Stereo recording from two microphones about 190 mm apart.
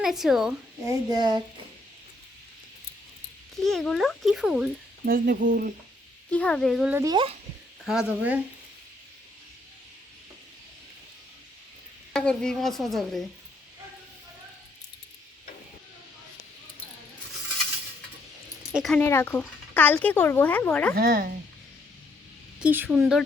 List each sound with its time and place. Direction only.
0.0 s a child's voice: centre (ahead or behind)
0.9 s speech: 20° right (ahead or behind)
3.5 s a child's voice: centre (ahead or behind)
5.0 s speech: 50° right (ahead or behind)
6.3 s a child's voice: 5° left (ahead or behind)
7.0 s speech: 25° right (ahead or behind)
7.9 s a child's voice: 5° right (ahead or behind)
12.1 s a child's voice: 5° left (ahead or behind)
18.7 s a child's voice: centre (ahead or behind)
19.0 s speech: 10° left (ahead or behind)
20.9 s speech: 50° right (ahead or behind)
22.6 s a woman's voice: 10° right (ahead or behind)